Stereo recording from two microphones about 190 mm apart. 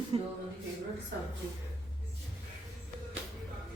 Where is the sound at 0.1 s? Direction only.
30° right (ahead or behind).